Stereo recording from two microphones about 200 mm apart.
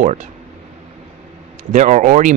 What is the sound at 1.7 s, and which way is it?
Speech, 35° right (ahead or behind).